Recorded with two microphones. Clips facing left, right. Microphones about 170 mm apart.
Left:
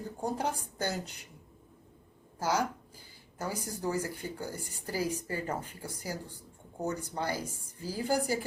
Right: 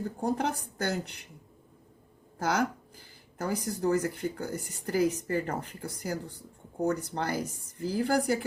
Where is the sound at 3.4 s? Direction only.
60° right (ahead or behind).